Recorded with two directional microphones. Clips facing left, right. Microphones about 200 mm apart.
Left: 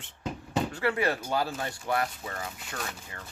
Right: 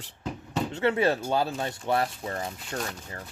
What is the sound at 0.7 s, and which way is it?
Speech, 25° right (ahead or behind).